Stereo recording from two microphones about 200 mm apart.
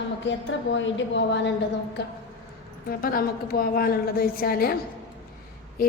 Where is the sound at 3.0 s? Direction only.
45° left (ahead or behind).